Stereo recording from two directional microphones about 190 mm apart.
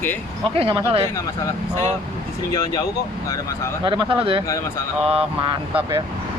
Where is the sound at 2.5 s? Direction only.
20° left (ahead or behind).